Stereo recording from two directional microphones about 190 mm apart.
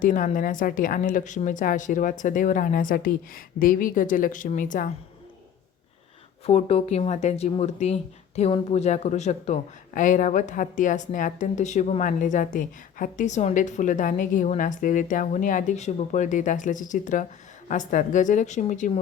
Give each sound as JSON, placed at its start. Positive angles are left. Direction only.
{"t": 0.0, "sound": "a woman's voice", "side_deg": 45}
{"t": 6.4, "sound": "speech", "side_deg": 35}